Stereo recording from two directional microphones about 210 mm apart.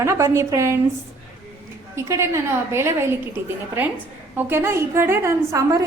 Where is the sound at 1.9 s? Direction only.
15° right (ahead or behind).